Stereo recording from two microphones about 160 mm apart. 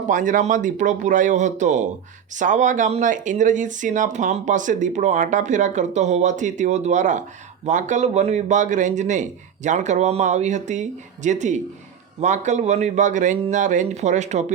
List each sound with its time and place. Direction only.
0.1 s speech: 55° right (ahead or behind)